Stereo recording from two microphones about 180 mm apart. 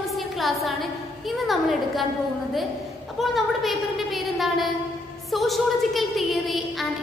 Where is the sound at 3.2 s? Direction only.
Centre (ahead or behind).